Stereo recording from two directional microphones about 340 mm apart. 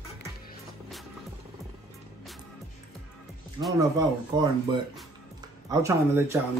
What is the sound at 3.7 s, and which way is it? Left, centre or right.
Speech, centre.